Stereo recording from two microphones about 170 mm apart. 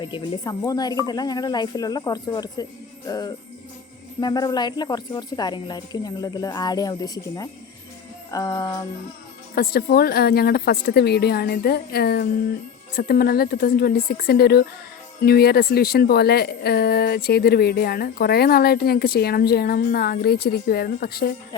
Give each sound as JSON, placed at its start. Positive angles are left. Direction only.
{"t": 0.0, "sound": "speech", "side_deg": 25}
{"t": 9.6, "sound": "speech", "side_deg": 60}